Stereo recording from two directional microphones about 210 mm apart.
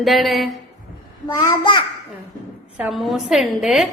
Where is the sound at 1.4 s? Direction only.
20° left (ahead or behind).